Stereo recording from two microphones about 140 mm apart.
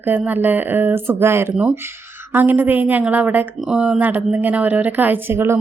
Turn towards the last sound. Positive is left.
turn(degrees=-15)  # may be behind; listen again after turning